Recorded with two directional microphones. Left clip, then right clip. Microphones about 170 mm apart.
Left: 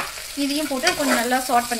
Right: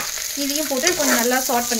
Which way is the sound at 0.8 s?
35° right (ahead or behind).